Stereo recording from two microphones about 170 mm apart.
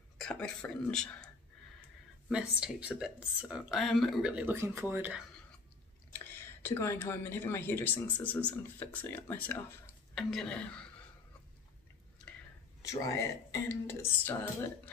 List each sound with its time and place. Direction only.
0.2 s speech: 5° left (ahead or behind)
2.2 s speech: 5° right (ahead or behind)
6.1 s speech: 15° left (ahead or behind)
12.8 s speech: 20° left (ahead or behind)